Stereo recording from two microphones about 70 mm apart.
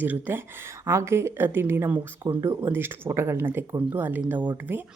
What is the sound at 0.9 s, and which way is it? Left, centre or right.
Speech, right.